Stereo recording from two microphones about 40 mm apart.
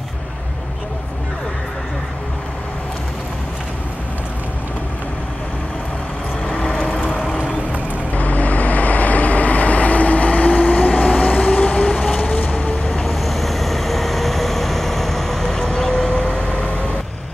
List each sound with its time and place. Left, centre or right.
6.9 s vehicle: left
8.1 s vehicle: left
11.7 s vehicle: centre
13.0 s vehicle: centre; by 16.8 s left